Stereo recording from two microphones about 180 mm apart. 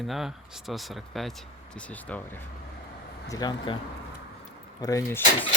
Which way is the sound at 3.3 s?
25° left (ahead or behind).